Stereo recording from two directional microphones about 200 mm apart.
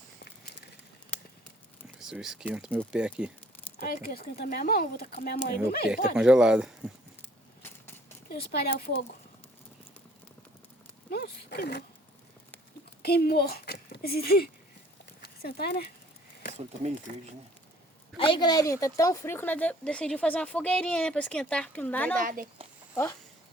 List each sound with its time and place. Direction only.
2.0 s speech: centre (ahead or behind)
3.8 s speech: 50° left (ahead or behind)
6.1 s speech: 5° right (ahead or behind)
7.2 s a sound: 10° left (ahead or behind)
8.3 s speech: 50° left (ahead or behind)
11.1 s speech: 50° left (ahead or behind)
13.0 s speech: 50° left (ahead or behind)
18.2 s speech: 25° left (ahead or behind); by 22.1 s 10° left (ahead or behind)
22.1 s speech: 45° right (ahead or behind)